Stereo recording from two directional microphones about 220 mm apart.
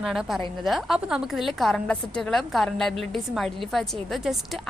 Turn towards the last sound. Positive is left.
turn(degrees=0)  # may be behind; listen again after turning